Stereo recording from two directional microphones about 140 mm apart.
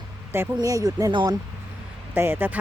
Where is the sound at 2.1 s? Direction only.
15° right (ahead or behind).